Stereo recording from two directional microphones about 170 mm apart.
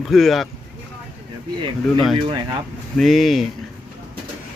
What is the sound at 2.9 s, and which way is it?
Speech, centre (ahead or behind).